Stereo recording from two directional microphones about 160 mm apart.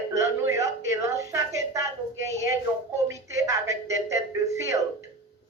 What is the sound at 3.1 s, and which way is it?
Speech, 20° right (ahead or behind).